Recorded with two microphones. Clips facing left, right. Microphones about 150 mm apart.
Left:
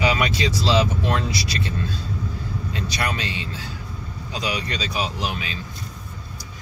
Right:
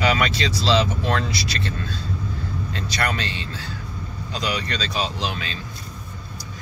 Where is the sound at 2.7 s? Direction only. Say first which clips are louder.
Right 1 dB; 15° left (ahead or behind).